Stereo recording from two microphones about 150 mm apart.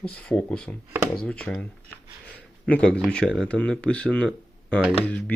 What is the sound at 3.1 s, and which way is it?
Speech, 5° left (ahead or behind).